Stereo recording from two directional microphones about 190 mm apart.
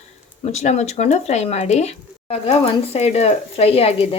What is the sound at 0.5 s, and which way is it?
Speech, 35° left (ahead or behind).